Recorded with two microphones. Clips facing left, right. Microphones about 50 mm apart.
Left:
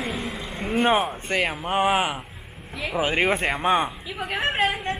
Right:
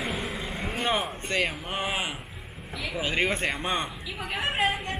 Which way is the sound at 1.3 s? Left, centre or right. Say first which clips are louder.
Left 4 dB; left.